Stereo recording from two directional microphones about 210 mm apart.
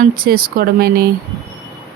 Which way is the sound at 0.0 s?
45° right (ahead or behind).